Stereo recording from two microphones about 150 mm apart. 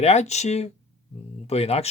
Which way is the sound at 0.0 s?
45° left (ahead or behind).